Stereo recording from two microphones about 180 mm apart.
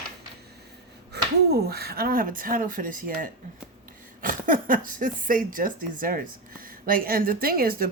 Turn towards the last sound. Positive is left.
turn(degrees=-55)  # may be behind; listen again after turning